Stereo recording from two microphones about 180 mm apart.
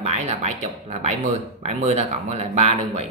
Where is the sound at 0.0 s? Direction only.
40° right (ahead or behind).